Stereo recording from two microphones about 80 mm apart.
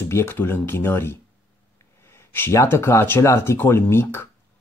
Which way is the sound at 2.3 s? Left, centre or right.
Left.